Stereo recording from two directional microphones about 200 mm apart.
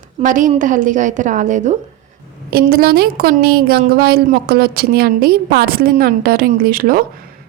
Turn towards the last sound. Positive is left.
turn(degrees=-45)  # may be behind; listen again after turning